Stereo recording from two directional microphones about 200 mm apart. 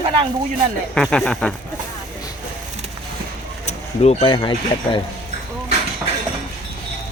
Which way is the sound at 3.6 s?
30° left (ahead or behind).